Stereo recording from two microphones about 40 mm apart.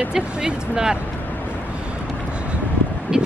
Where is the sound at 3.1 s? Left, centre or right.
Centre.